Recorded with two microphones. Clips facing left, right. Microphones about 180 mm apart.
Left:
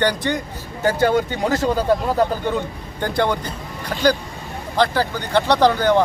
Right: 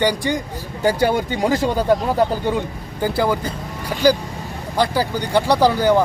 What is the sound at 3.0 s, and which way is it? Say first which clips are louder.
A man's voice: right 1 dB; 5° right (ahead or behind).